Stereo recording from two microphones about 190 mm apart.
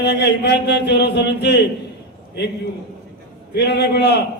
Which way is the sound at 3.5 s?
65° left (ahead or behind).